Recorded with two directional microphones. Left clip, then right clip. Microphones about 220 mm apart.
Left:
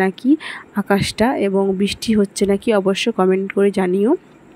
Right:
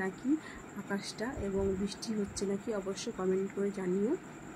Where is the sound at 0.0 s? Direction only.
40° left (ahead or behind).